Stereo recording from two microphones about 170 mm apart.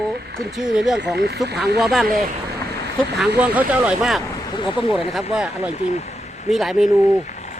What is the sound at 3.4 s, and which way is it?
Speech, 10° right (ahead or behind).